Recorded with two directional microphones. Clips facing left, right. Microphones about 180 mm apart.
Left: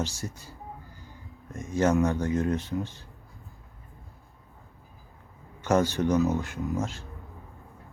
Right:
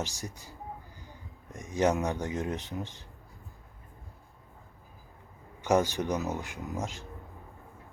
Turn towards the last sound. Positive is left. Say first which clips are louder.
# left 6 dB
turn(degrees=-15)  # may be behind; listen again after turning